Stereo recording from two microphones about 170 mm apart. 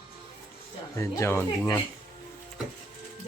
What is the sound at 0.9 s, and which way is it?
Speech, 15° left (ahead or behind).